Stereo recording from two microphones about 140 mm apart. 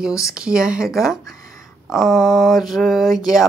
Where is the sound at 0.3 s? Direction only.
5° right (ahead or behind).